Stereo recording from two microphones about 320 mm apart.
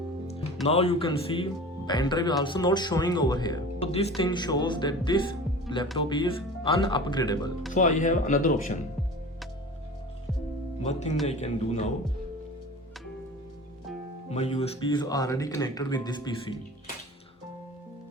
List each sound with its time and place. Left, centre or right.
0.7 s speech: centre
7.7 s speech: left
10.8 s speech: left
14.3 s speech: centre